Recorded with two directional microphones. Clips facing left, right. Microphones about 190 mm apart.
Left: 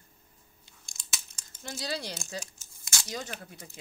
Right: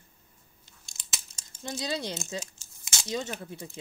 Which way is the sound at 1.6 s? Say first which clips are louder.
Right 3 dB; 20° right (ahead or behind).